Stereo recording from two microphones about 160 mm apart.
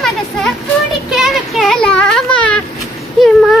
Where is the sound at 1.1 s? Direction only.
Centre (ahead or behind).